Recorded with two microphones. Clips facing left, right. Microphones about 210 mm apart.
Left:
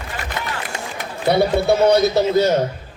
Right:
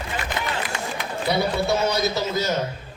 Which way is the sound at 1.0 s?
55° left (ahead or behind).